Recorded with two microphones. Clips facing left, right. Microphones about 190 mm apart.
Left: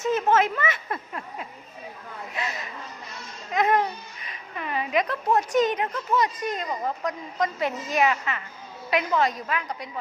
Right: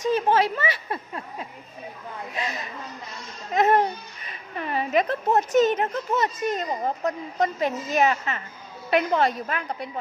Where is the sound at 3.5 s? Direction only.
40° right (ahead or behind).